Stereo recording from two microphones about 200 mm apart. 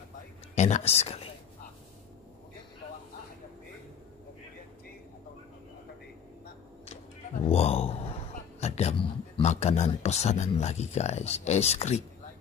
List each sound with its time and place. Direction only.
0.6 s speech: 35° left (ahead or behind)
7.4 s a man's voice: 30° left (ahead or behind)
8.5 s a sound: 35° left (ahead or behind)
9.4 s speech: 35° left (ahead or behind)